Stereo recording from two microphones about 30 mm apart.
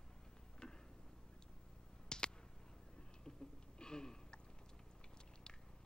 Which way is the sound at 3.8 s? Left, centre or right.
Left.